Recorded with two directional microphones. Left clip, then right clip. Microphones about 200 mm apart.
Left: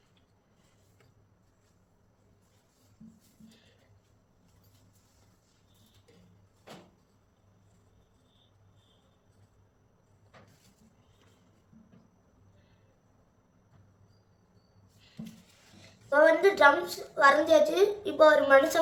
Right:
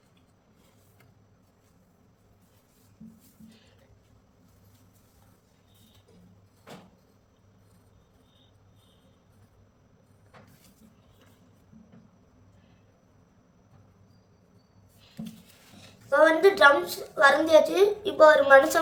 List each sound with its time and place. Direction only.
16.0 s a woman's voice: 20° right (ahead or behind)